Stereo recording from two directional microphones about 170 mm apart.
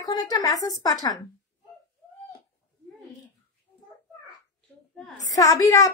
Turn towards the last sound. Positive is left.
turn(degrees=20)  # may be behind; listen again after turning